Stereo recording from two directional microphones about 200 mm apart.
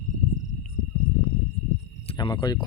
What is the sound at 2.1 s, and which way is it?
Speech, 20° left (ahead or behind).